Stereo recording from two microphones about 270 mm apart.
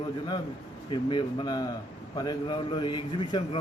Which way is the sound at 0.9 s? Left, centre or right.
Centre.